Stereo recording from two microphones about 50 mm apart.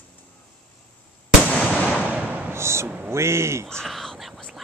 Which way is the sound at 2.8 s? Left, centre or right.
Right.